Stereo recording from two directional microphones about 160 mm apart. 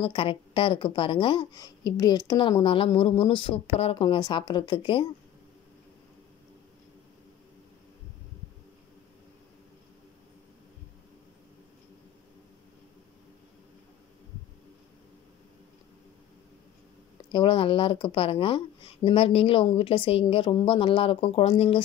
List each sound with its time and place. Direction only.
0.0 s a woman's voice: 35° left (ahead or behind)
17.3 s a woman's voice: 30° left (ahead or behind)